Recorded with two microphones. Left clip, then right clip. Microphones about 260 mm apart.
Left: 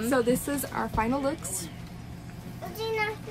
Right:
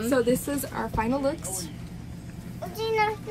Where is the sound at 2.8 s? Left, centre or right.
Right.